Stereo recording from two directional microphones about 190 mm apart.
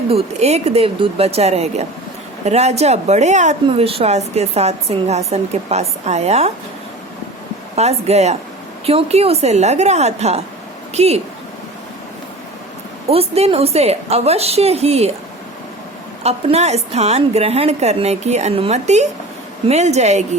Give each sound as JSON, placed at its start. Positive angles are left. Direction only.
{"t": 0.1, "sound": "speech", "side_deg": -35}
{"t": 7.8, "sound": "speech", "side_deg": -35}
{"t": 13.1, "sound": "speech", "side_deg": -30}
{"t": 16.2, "sound": "speech", "side_deg": -35}